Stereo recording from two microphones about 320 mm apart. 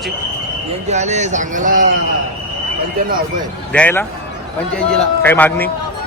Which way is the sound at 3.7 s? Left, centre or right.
Centre.